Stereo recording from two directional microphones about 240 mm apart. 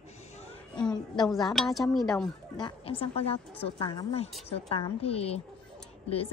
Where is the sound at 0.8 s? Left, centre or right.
Centre.